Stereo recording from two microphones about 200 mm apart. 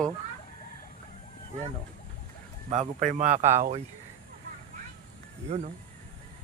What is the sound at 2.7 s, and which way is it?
A man's voice, 35° right (ahead or behind).